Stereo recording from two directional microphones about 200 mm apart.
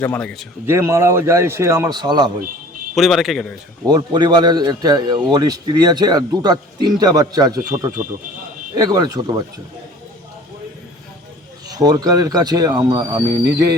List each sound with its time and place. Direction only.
0.0 s a man's voice: 10° left (ahead or behind)
0.6 s a man's voice: 10° right (ahead or behind)
2.9 s a man's voice: centre (ahead or behind)
3.8 s a man's voice: 20° right (ahead or behind)
11.7 s a man's voice: 20° right (ahead or behind)